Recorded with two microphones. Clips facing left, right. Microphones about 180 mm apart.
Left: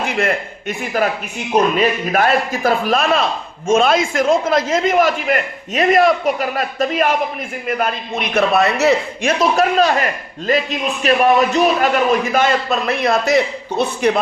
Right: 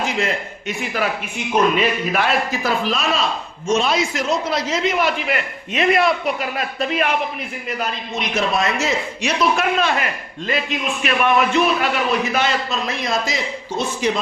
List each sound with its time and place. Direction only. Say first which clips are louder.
0.0 s a man's voice: left 3 dB; 55° left (ahead or behind); by 7.2 s 40° left (ahead or behind)
7.7 s a man's voice: left 6 dB; 55° left (ahead or behind)
9.4 s a man's voice: left 4 dB; 40° left (ahead or behind); by 14.2 s 60° left (ahead or behind)